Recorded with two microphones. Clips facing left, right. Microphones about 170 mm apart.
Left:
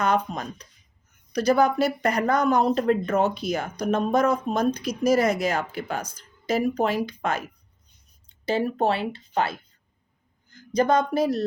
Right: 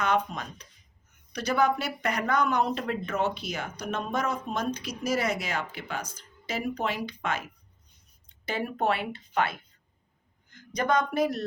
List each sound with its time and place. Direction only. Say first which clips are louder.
0.0 s speech: left 3 dB; 40° left (ahead or behind)
8.4 s speech: left 5 dB; 30° left (ahead or behind)
10.5 s a sound: left 5 dB; 30° left (ahead or behind)